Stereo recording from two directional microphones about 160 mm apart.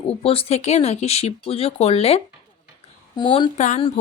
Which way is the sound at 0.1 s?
35° left (ahead or behind).